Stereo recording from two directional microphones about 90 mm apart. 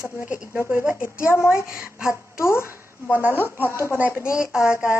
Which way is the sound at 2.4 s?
30° left (ahead or behind).